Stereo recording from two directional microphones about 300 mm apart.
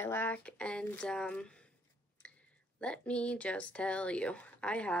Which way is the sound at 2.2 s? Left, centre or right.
Centre.